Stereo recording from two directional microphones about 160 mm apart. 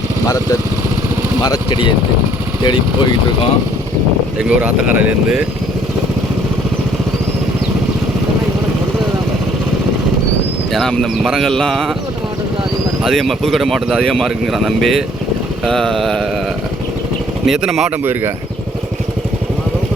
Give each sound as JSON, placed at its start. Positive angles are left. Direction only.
{"t": 1.4, "sound": "speech", "side_deg": 30}
{"t": 4.4, "sound": "speech", "side_deg": -5}
{"t": 10.7, "sound": "speech", "side_deg": 0}
{"t": 13.1, "sound": "speech", "side_deg": 0}
{"t": 17.4, "sound": "speech", "side_deg": 0}